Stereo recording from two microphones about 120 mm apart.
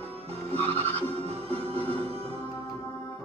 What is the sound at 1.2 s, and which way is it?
Music, 55° right (ahead or behind).